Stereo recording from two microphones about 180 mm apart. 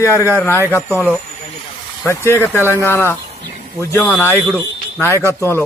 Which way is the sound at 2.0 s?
15° left (ahead or behind).